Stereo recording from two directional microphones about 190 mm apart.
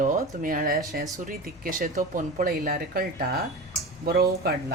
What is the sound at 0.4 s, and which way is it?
Speech, 45° right (ahead or behind).